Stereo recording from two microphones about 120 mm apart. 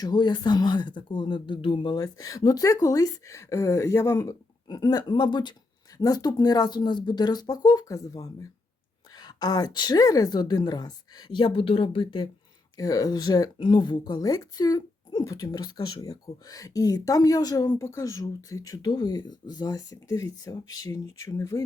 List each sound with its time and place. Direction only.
0.0 s speech: 40° left (ahead or behind)
2.0 s speech: 30° left (ahead or behind)
4.7 s speech: 35° left (ahead or behind)
12.7 s speech: 30° left (ahead or behind)